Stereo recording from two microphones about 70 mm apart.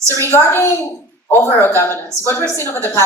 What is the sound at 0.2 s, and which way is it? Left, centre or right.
Speech, left.